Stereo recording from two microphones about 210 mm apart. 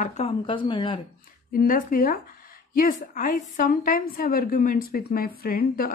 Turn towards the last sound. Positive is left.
turn(degrees=45)  # may be behind; listen again after turning